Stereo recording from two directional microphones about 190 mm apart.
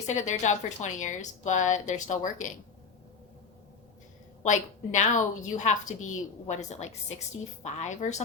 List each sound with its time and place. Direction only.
0.1 s a woman's voice: 40° left (ahead or behind)
4.4 s a woman's voice: 40° left (ahead or behind)